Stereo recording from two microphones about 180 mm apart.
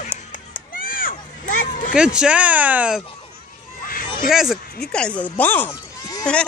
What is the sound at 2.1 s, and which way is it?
Speech, 5° right (ahead or behind).